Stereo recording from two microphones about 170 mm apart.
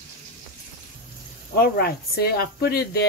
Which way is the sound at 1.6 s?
65° left (ahead or behind).